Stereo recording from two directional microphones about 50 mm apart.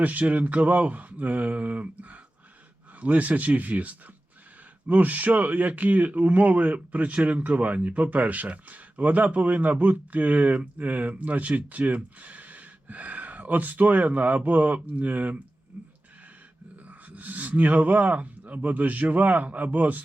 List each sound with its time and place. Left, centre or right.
0.0 s a man's voice: right
15.7 s a sound: right
16.8 s a man's voice: right